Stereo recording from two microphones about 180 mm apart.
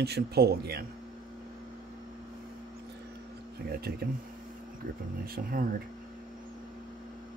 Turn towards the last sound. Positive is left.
turn(degrees=-55)  # may be behind; listen again after turning